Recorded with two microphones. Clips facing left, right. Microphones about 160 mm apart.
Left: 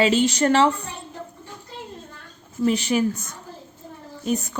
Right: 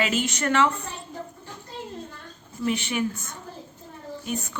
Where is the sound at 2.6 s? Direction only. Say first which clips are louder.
Left 6 dB; 35° left (ahead or behind).